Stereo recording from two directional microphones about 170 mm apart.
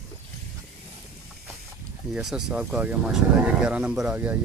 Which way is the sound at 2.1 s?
5° right (ahead or behind).